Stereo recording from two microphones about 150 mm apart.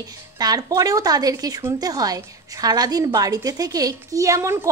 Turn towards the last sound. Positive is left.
turn(degrees=-20)  # may be behind; listen again after turning